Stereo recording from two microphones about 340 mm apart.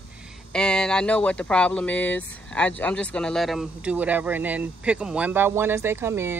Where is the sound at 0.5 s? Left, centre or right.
Centre.